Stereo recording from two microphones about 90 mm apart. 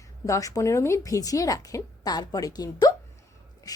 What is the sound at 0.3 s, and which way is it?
Speech, 40° left (ahead or behind).